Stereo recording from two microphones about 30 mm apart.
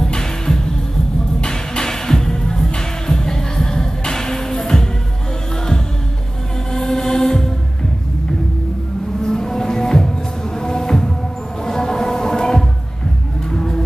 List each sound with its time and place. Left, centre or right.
0.0 s music: left
6.7 s music: centre
9.2 s music: centre